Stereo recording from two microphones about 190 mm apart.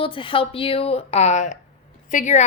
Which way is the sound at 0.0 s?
25° left (ahead or behind).